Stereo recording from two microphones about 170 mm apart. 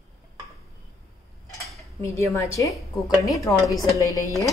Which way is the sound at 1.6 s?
15° left (ahead or behind).